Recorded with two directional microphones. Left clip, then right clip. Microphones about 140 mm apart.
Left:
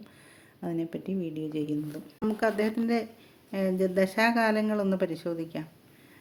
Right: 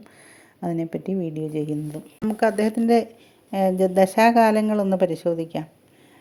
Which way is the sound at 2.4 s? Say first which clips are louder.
Right 8 dB; 40° right (ahead or behind).